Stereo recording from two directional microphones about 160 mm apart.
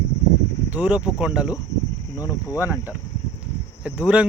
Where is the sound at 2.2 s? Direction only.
20° left (ahead or behind).